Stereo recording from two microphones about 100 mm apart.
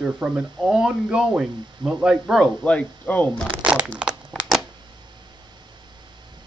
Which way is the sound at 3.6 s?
10° right (ahead or behind).